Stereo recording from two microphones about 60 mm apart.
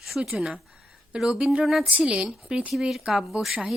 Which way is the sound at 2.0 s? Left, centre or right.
Right.